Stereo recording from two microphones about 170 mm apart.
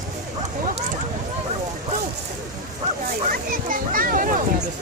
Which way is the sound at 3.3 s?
55° right (ahead or behind).